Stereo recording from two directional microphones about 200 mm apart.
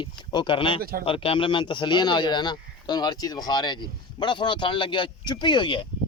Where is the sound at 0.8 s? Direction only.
45° right (ahead or behind).